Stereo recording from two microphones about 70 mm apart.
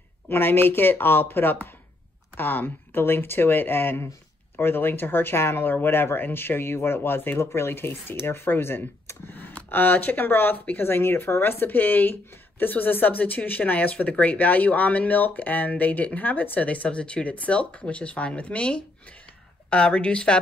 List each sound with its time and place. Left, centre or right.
0.3 s a woman's voice: left; by 20.3 s centre